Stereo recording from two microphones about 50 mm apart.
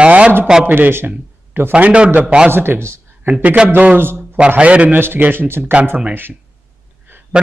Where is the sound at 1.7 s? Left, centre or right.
Right.